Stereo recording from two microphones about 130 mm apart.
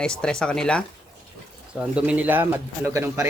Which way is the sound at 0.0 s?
5° left (ahead or behind).